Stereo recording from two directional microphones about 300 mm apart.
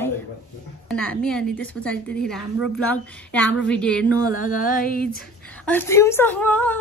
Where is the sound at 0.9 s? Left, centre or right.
Centre.